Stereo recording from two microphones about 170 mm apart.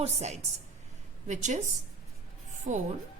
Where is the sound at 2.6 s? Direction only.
45° right (ahead or behind).